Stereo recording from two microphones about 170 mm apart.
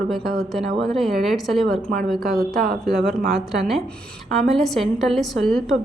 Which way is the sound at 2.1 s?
60° right (ahead or behind).